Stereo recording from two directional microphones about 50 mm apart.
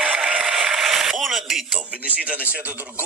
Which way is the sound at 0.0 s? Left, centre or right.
Centre.